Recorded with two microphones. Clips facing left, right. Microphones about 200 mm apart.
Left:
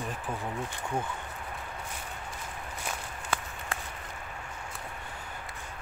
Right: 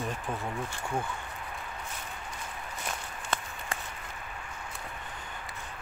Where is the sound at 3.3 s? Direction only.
10° left (ahead or behind).